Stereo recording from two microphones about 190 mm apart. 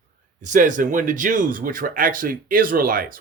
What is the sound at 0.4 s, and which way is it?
Speech, 45° right (ahead or behind).